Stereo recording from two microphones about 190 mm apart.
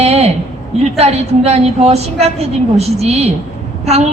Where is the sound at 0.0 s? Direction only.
35° right (ahead or behind).